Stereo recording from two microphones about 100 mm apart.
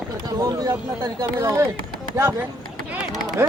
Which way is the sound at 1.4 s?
25° right (ahead or behind).